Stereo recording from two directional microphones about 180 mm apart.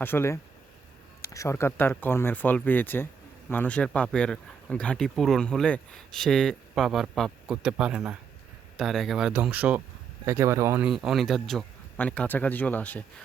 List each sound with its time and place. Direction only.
0.0 s speech: 10° left (ahead or behind); by 10.8 s 15° right (ahead or behind)
10.8 s speech: centre (ahead or behind)